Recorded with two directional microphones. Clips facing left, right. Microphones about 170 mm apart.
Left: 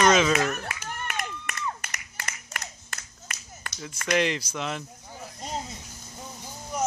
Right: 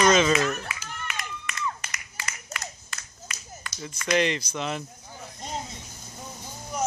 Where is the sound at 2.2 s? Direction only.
50° left (ahead or behind).